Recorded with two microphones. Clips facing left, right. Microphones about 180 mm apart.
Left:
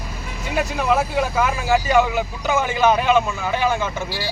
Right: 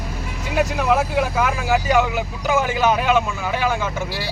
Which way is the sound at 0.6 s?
10° right (ahead or behind).